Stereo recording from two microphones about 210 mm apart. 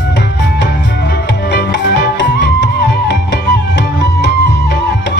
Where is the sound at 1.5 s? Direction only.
55° left (ahead or behind).